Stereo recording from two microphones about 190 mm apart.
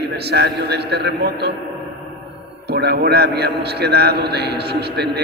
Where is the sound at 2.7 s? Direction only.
60° right (ahead or behind).